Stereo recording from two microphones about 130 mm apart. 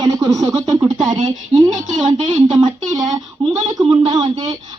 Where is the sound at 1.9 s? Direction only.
35° right (ahead or behind).